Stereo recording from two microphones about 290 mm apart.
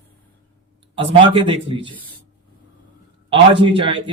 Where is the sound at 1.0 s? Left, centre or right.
Centre.